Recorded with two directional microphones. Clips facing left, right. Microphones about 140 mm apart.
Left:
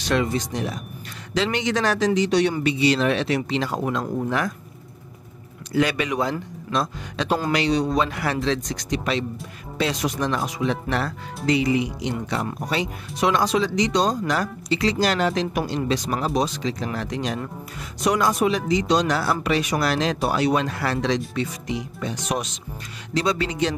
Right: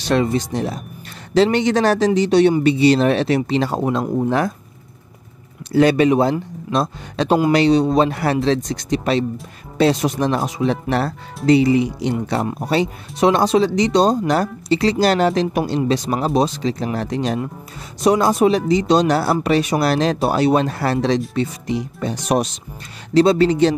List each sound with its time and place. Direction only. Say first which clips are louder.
0.0 s speech: right 5 dB; 30° right (ahead or behind)
5.7 s speech: right 9 dB; 30° right (ahead or behind)